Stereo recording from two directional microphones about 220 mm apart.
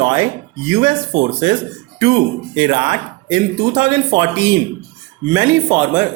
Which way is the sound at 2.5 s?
25° right (ahead or behind).